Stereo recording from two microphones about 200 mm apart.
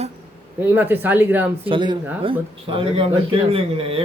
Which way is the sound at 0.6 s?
10° right (ahead or behind).